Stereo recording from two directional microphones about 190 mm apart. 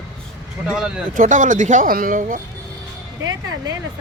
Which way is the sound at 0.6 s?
5° right (ahead or behind).